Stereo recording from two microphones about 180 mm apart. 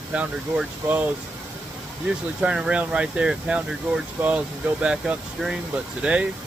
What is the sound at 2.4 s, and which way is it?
Speech, 5° right (ahead or behind).